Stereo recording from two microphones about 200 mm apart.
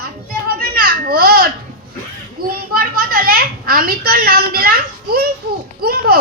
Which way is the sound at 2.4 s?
45° right (ahead or behind).